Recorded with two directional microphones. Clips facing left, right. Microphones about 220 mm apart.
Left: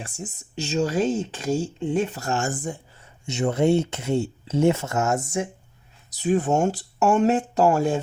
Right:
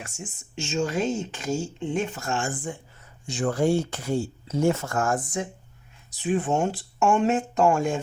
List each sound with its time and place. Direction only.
0.0 s speech: 35° left (ahead or behind)
3.2 s speech: 25° left (ahead or behind)
6.1 s speech: 40° left (ahead or behind)